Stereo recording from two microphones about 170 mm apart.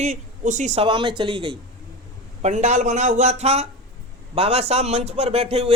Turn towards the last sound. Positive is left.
turn(degrees=-35)  # may be behind; listen again after turning